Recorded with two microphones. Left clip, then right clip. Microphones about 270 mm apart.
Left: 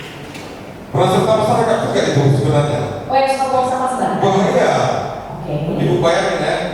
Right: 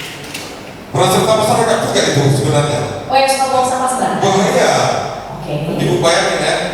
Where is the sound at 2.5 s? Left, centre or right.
Centre.